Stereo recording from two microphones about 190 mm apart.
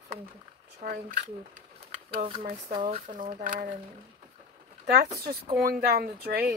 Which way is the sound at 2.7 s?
30° right (ahead or behind).